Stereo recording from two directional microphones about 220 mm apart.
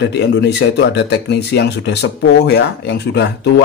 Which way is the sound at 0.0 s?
50° left (ahead or behind).